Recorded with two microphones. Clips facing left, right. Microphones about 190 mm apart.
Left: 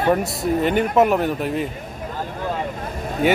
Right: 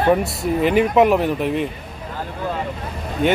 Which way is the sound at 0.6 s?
Centre (ahead or behind).